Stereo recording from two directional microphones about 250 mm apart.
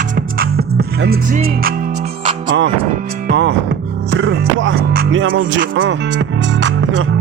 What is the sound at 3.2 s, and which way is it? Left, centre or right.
Music, right.